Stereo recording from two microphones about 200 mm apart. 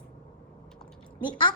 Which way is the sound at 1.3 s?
25° left (ahead or behind).